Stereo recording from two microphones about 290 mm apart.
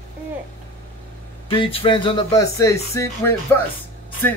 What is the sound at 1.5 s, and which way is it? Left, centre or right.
Speech, centre.